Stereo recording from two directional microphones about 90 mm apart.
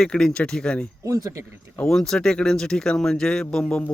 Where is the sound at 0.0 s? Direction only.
5° left (ahead or behind).